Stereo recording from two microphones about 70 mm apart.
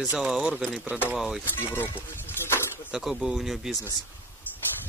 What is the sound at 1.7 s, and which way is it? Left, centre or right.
Speech, right.